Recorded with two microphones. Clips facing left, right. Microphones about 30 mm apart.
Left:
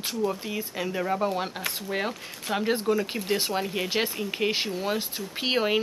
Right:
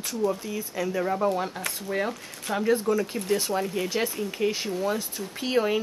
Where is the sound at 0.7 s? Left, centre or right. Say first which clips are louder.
Right 2 dB; left.